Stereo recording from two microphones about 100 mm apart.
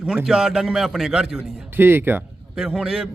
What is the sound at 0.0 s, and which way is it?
A man's voice, 5° right (ahead or behind).